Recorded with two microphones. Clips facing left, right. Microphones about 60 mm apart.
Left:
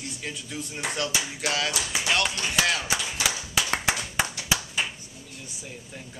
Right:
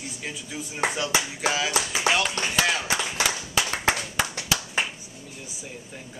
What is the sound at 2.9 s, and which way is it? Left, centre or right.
Clapping, centre.